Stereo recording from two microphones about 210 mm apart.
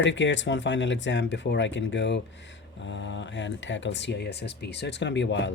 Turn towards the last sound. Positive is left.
turn(degrees=55)  # may be behind; listen again after turning